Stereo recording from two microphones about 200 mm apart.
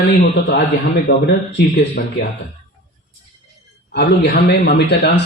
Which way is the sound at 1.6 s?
60° left (ahead or behind).